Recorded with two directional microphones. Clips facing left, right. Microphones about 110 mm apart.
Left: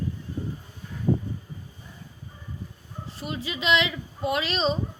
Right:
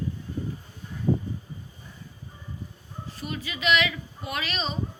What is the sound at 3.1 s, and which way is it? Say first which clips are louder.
Speech: left 3 dB; 25° left (ahead or behind).